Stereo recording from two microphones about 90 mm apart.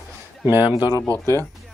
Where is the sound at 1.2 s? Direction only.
30° left (ahead or behind).